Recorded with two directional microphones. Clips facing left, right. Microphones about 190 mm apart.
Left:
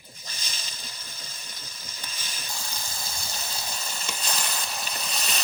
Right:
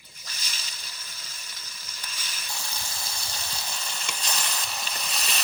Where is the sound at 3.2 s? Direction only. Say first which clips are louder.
Left 1 dB; 25° left (ahead or behind).